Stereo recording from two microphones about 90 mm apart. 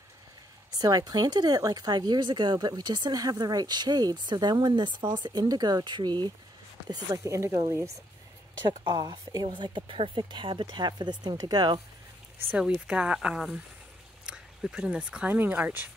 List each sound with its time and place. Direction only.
0.7 s speech: 45° right (ahead or behind)
7.2 s speech: 35° right (ahead or behind)
8.6 s a woman's voice: 55° right (ahead or behind)
12.8 s speech: 10° right (ahead or behind)